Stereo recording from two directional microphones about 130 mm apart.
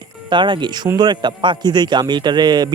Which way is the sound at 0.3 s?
40° right (ahead or behind).